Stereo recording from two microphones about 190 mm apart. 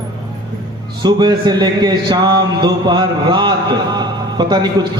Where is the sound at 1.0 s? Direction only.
20° right (ahead or behind).